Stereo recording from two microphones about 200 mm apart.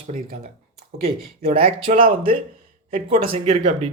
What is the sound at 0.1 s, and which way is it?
Speech, 45° right (ahead or behind).